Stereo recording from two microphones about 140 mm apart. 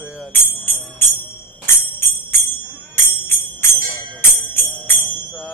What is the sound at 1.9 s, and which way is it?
Jingle bell, 15° left (ahead or behind).